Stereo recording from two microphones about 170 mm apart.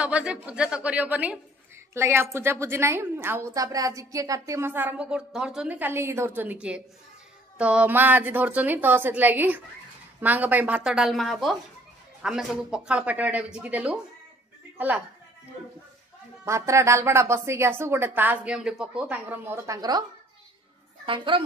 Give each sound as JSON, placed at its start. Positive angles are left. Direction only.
{"t": 0.0, "sound": "a woman's voice", "side_deg": -5}
{"t": 16.4, "sound": "a woman's voice", "side_deg": -15}